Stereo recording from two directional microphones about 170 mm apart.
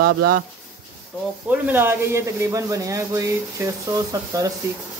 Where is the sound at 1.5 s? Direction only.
10° right (ahead or behind).